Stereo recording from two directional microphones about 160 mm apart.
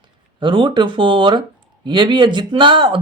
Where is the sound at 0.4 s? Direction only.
30° right (ahead or behind).